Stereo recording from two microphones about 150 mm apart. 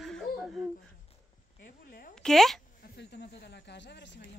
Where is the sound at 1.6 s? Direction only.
70° left (ahead or behind).